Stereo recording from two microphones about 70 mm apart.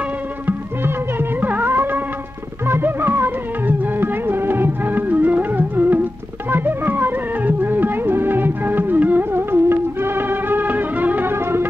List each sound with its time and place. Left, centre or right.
1.4 s music: right